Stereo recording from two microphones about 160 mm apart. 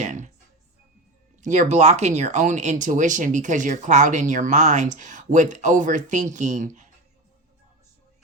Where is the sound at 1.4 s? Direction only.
50° right (ahead or behind).